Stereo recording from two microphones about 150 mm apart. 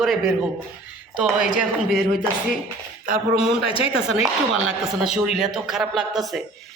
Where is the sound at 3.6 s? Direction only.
40° left (ahead or behind).